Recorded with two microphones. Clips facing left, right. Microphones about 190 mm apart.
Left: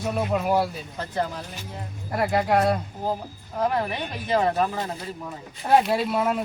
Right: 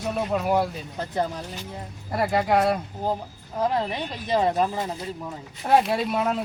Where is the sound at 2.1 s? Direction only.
Centre (ahead or behind).